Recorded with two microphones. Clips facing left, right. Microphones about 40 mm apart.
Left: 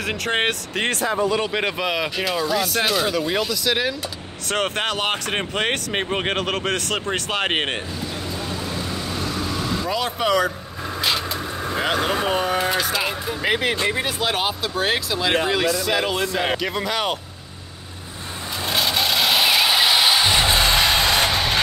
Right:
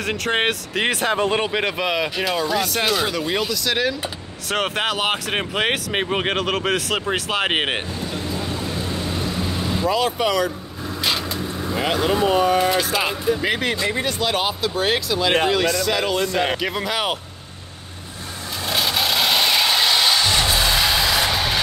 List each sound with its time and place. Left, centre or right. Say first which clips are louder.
0.0 s speech: right 1 dB; centre
1.0 s speech: even; right
1.5 s speech: right 1 dB; centre
9.8 s speech: right 3 dB; centre
11.7 s speech: right 1 dB; centre
16.3 s speech: right 1 dB; centre
18.7 s a sound: even; centre
20.4 s music: left 1 dB; left
21.3 s vehicle: even; centre